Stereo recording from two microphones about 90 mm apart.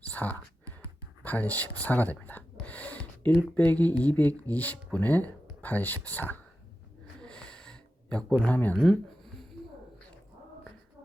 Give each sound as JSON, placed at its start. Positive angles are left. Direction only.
{"t": 0.1, "sound": "speech", "side_deg": 20}
{"t": 7.2, "sound": "snort", "side_deg": 10}
{"t": 8.4, "sound": "speech", "side_deg": 15}
{"t": 8.8, "sound": "a sound", "side_deg": 5}